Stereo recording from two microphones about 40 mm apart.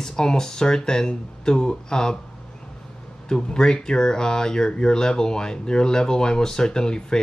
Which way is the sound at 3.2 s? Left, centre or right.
Centre.